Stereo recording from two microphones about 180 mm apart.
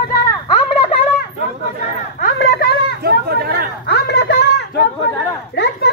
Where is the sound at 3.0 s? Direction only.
60° right (ahead or behind).